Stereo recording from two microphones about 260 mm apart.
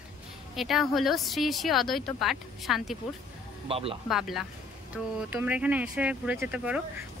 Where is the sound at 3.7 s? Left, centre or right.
Right.